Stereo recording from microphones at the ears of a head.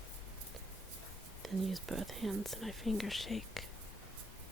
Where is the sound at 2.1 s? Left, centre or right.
Centre.